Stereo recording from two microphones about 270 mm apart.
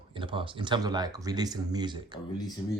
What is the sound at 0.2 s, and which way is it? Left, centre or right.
Speech, centre.